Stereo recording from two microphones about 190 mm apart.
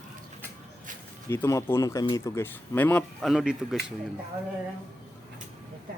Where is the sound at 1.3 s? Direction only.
15° left (ahead or behind); by 3.7 s 5° right (ahead or behind).